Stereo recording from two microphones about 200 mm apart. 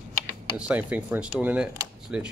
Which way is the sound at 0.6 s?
5° right (ahead or behind).